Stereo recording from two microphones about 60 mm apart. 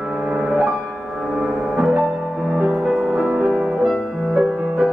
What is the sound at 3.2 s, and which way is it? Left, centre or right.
Music, right.